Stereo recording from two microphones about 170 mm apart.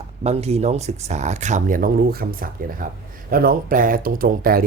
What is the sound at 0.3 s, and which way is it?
Speech, 40° right (ahead or behind).